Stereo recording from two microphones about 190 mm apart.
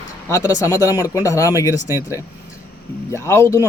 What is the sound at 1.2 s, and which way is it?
Speech, 15° left (ahead or behind).